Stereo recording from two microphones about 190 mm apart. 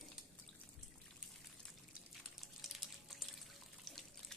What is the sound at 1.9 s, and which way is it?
Water, centre (ahead or behind).